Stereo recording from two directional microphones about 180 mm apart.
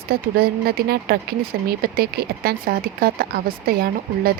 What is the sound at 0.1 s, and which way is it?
Speech, 60° right (ahead or behind).